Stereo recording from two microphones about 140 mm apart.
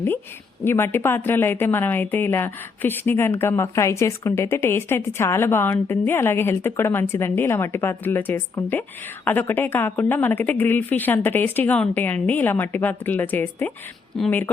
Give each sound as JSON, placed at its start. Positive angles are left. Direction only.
{"t": 0.6, "sound": "a woman's voice", "side_deg": 15}